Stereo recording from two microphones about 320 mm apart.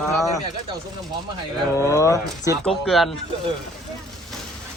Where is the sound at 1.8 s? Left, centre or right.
Centre.